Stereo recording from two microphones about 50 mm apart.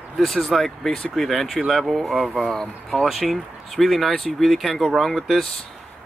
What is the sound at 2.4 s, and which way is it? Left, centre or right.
Speech, centre.